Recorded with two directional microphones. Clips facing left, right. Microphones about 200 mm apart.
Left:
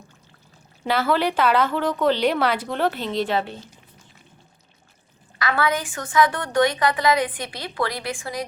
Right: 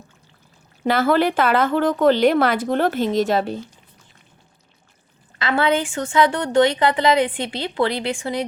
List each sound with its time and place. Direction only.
0.9 s a woman's voice: 50° right (ahead or behind)
5.4 s a woman's voice: 25° right (ahead or behind)